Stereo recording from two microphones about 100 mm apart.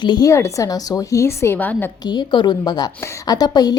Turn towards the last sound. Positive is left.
turn(degrees=40)  # may be behind; listen again after turning